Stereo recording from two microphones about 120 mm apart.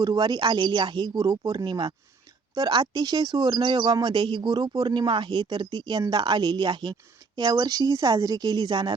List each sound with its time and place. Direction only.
0.0 s speech: 35° right (ahead or behind)